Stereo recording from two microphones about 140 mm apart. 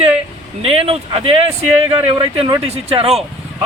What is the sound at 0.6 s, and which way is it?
Speech, 40° right (ahead or behind).